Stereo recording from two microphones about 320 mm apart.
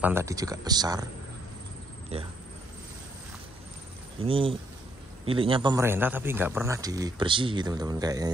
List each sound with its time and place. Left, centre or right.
0.0 s a man's voice: centre
2.1 s speech: centre
4.2 s a man's voice: centre